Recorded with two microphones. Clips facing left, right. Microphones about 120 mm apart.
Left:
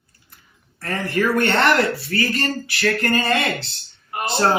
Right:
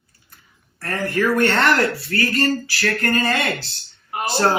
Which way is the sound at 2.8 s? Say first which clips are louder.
Left 1 dB; centre (ahead or behind).